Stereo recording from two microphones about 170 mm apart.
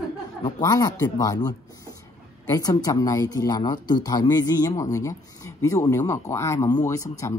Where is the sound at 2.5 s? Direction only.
20° left (ahead or behind).